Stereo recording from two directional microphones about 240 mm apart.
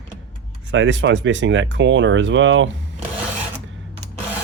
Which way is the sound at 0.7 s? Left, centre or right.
Right.